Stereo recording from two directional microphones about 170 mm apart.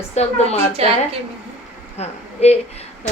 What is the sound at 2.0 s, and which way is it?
Speech, 40° left (ahead or behind).